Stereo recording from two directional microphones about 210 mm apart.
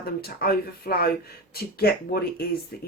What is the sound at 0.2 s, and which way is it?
Speech, 45° left (ahead or behind).